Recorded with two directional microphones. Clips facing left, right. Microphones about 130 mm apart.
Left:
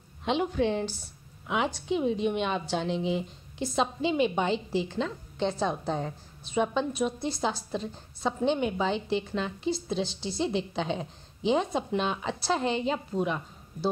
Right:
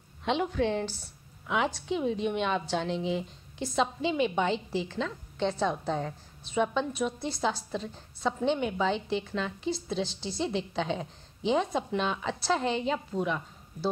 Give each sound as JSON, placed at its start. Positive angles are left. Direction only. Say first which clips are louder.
{"t": 0.2, "sound": "a woman's voice", "louder": "left 1 dB", "side_deg": 15}
{"t": 7.2, "sound": "a woman's voice", "louder": "even", "side_deg": 5}
{"t": 7.7, "sound": "a woman's voice", "louder": "left 2 dB", "side_deg": 15}